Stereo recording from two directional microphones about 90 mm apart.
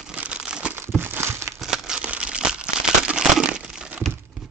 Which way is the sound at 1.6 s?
5° right (ahead or behind).